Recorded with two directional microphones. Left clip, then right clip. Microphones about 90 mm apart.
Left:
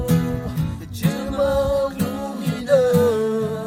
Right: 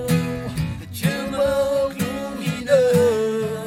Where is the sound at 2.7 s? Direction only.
55° right (ahead or behind).